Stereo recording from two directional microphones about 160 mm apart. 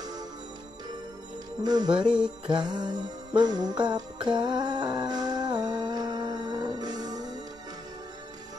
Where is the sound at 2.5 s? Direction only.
25° right (ahead or behind).